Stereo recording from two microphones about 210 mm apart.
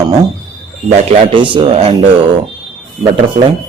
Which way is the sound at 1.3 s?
25° right (ahead or behind).